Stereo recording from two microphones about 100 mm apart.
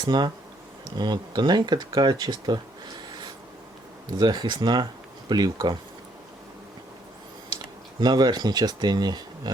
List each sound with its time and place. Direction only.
0.0 s speech: 50° right (ahead or behind)
4.2 s speech: 45° right (ahead or behind)
8.0 s speech: 45° right (ahead or behind)